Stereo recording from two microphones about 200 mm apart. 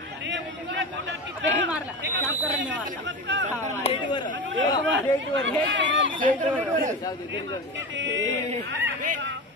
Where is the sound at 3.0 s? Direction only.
65° right (ahead or behind).